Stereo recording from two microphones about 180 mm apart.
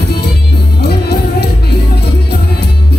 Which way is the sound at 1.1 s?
65° left (ahead or behind).